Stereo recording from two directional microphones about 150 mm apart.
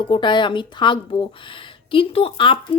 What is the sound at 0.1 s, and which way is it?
A woman's voice, 30° left (ahead or behind).